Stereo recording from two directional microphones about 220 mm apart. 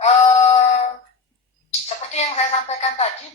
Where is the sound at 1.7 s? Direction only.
30° left (ahead or behind).